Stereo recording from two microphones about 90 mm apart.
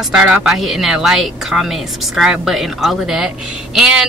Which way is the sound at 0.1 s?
10° right (ahead or behind).